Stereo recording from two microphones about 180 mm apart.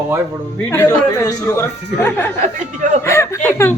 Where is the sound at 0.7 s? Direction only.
15° left (ahead or behind).